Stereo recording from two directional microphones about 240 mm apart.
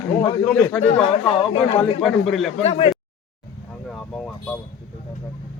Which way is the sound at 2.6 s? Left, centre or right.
Left.